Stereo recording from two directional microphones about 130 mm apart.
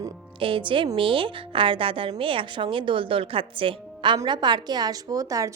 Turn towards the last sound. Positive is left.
turn(degrees=-25)  # may be behind; listen again after turning